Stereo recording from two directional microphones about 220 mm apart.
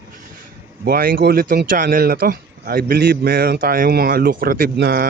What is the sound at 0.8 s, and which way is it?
Speech, 45° right (ahead or behind).